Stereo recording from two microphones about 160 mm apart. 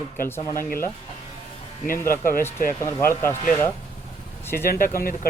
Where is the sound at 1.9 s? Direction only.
60° left (ahead or behind).